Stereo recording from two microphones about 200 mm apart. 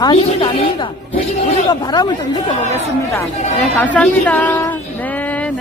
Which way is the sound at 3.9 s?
5° left (ahead or behind).